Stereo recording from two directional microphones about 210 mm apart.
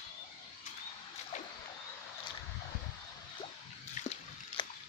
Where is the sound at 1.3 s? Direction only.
35° left (ahead or behind).